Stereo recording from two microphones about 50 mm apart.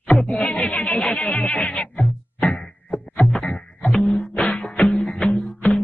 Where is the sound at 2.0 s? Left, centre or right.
Centre.